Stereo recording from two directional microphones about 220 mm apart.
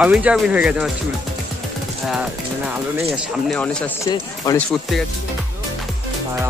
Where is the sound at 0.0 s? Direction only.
5° right (ahead or behind).